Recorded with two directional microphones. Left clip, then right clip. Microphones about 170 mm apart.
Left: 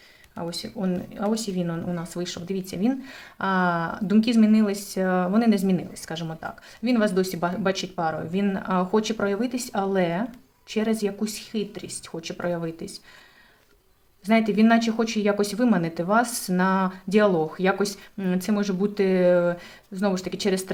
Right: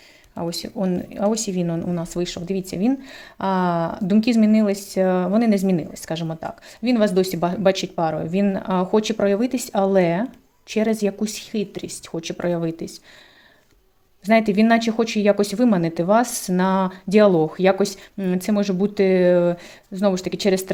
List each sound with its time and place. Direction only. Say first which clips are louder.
0.3 s speech: right 5 dB; 35° right (ahead or behind)
14.3 s speech: right 4 dB; 35° right (ahead or behind)